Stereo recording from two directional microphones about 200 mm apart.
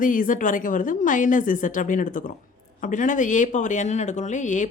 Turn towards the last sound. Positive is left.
turn(degrees=35)  # may be behind; listen again after turning